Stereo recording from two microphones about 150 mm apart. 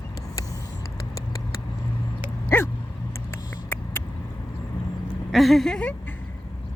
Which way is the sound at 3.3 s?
15° left (ahead or behind).